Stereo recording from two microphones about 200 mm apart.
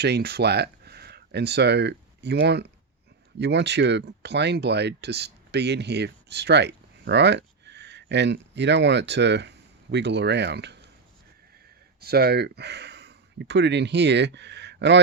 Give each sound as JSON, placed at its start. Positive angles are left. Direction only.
{"t": 0.0, "sound": "speech", "side_deg": -55}
{"t": 11.9, "sound": "speech", "side_deg": -50}